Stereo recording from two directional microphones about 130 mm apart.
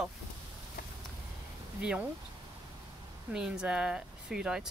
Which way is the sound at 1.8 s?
10° right (ahead or behind).